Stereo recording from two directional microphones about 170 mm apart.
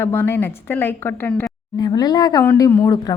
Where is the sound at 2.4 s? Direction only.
15° left (ahead or behind).